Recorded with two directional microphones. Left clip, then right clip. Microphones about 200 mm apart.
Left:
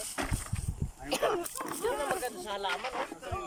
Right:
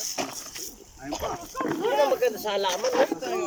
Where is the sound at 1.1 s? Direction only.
60° left (ahead or behind).